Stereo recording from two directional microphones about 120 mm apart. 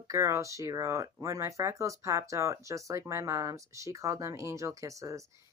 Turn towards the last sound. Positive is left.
turn(degrees=-25)  # may be behind; listen again after turning